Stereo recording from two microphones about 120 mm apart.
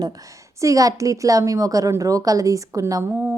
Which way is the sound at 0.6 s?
30° right (ahead or behind).